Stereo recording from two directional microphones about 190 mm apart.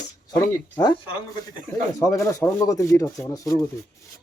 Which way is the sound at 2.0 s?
15° left (ahead or behind).